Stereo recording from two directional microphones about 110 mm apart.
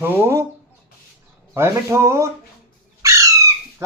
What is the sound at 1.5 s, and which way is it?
Speech, 25° right (ahead or behind).